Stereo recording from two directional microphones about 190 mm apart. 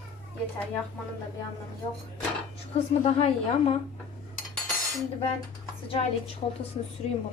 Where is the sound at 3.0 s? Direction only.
35° left (ahead or behind).